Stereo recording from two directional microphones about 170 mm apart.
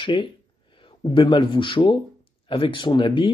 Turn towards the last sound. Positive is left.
turn(degrees=30)  # may be behind; listen again after turning